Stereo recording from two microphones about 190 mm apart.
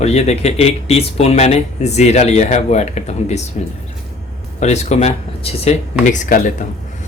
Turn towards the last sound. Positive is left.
turn(degrees=40)  # may be behind; listen again after turning